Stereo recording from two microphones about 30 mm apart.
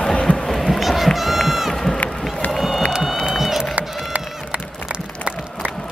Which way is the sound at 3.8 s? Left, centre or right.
Right.